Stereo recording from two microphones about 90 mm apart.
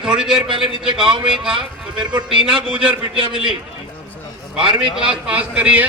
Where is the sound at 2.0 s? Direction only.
60° right (ahead or behind).